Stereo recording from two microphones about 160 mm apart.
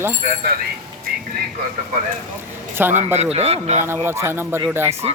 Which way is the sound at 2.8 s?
10° right (ahead or behind).